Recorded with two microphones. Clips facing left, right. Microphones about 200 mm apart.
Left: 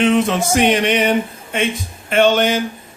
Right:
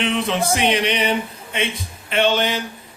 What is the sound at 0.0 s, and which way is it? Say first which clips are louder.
A man's voice: left 6 dB; 45° left (ahead or behind).